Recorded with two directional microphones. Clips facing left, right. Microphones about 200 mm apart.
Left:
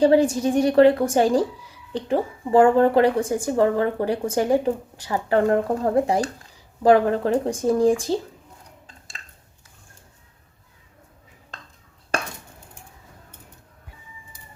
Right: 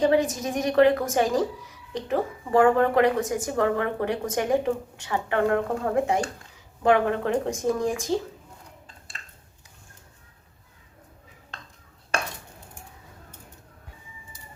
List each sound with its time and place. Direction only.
0.0 s a woman's voice: 30° left (ahead or behind)